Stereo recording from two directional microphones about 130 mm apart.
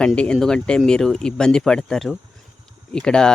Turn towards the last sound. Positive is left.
turn(degrees=5)  # may be behind; listen again after turning